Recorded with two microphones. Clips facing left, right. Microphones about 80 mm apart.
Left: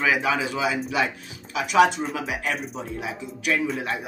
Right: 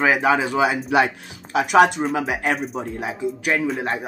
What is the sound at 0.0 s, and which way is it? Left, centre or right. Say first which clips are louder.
Speech: right 5 dB; right.